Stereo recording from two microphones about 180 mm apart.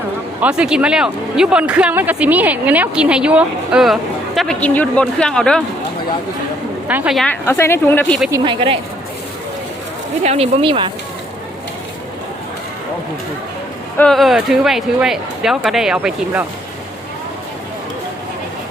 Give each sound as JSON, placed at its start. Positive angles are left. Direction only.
{"t": 0.4, "sound": "speech", "side_deg": -5}
{"t": 4.4, "sound": "speech", "side_deg": 5}
{"t": 6.8, "sound": "speech", "side_deg": -5}
{"t": 7.4, "sound": "speech", "side_deg": 15}
{"t": 8.3, "sound": "speech", "side_deg": -30}
{"t": 10.2, "sound": "speech", "side_deg": -35}
{"t": 14.0, "sound": "speech", "side_deg": 0}